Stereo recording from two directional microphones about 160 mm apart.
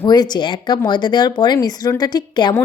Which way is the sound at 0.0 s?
25° left (ahead or behind).